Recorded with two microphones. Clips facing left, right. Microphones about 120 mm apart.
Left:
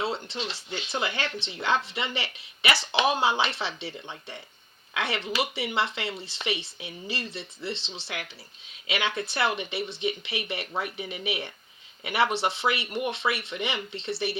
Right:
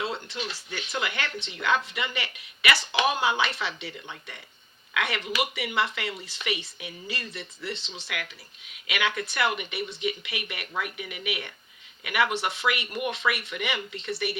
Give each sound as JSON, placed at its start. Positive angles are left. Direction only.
{"t": 0.0, "sound": "speech", "side_deg": 30}